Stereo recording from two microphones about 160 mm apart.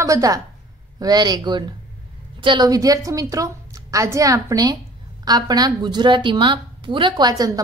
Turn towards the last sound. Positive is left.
turn(degrees=-25)  # may be behind; listen again after turning